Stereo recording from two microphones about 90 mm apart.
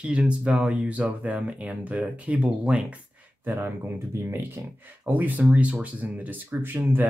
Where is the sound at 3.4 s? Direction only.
25° right (ahead or behind).